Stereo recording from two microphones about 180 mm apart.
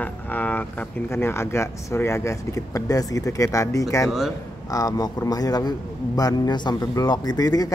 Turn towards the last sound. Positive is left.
turn(degrees=20)  # may be behind; listen again after turning